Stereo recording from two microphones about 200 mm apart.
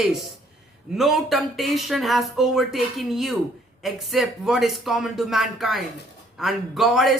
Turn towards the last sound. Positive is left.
turn(degrees=0)  # may be behind; listen again after turning